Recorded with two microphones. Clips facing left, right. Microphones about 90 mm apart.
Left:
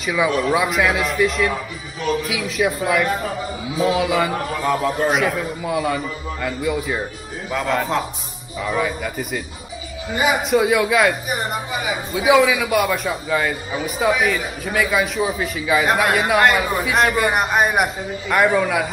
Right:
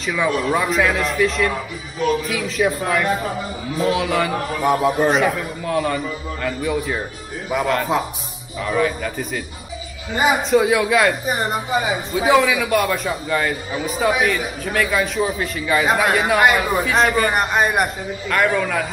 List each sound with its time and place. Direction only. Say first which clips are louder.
0.0 s speech: left 1 dB; 5° left (ahead or behind)
11.2 s a woman's voice: right 3 dB; 35° right (ahead or behind)
12.3 s speech: left 1 dB; centre (ahead or behind)
18.3 s a man's voice: left 2 dB; 15° left (ahead or behind)